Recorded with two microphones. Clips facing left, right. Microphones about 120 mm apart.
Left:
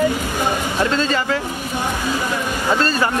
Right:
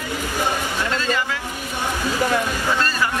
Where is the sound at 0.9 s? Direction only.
35° left (ahead or behind).